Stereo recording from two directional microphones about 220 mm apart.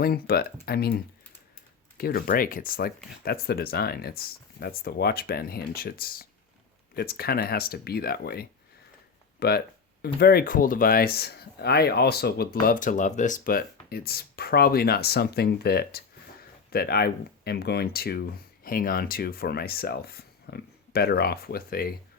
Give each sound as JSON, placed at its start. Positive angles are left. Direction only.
{"t": 0.0, "sound": "speech", "side_deg": 45}